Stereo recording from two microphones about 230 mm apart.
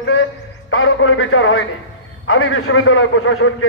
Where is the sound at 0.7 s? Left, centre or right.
Left.